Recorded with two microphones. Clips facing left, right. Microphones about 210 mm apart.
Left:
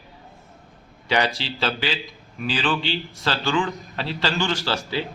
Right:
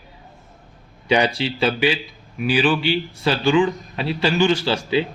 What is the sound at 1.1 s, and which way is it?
A man's voice, 15° right (ahead or behind).